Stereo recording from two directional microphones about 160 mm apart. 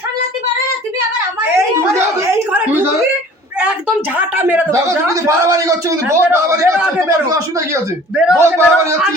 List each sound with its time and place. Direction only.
2.5 s a sound: 10° right (ahead or behind)
4.2 s a man's voice: 10° right (ahead or behind)
8.1 s speech: 5° right (ahead or behind)
8.4 s a man's voice: 15° right (ahead or behind)